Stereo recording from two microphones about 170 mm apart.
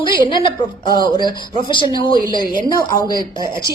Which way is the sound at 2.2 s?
55° right (ahead or behind).